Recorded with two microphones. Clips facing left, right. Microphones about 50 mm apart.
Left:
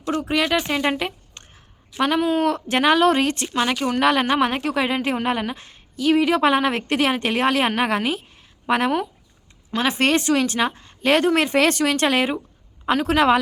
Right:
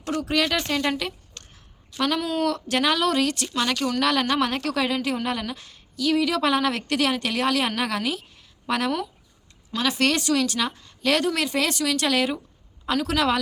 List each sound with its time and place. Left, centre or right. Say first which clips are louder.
0.2 s a woman's voice: left 2 dB; centre